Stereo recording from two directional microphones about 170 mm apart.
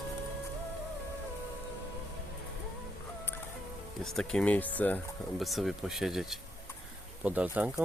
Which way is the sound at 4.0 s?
5° left (ahead or behind).